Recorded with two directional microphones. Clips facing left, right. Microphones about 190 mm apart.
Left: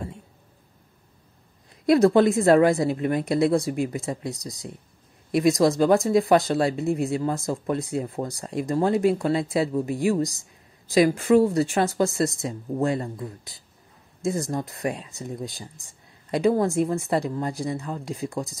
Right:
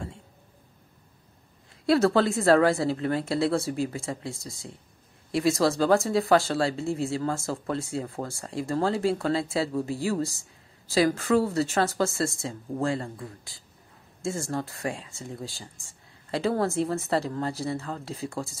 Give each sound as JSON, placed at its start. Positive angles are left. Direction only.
{"t": 1.9, "sound": "speech", "side_deg": 15}